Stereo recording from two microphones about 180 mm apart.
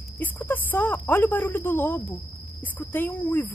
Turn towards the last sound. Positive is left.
turn(degrees=10)  # may be behind; listen again after turning